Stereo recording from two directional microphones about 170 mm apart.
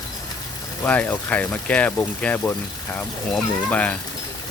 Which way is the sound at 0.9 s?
10° left (ahead or behind).